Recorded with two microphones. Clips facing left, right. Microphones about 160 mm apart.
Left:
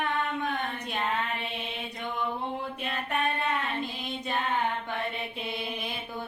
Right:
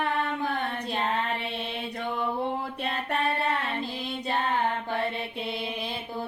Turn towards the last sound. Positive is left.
turn(degrees=-30)  # may be behind; listen again after turning